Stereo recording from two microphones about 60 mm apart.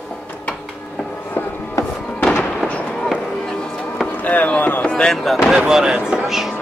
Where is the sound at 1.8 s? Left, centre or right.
Left.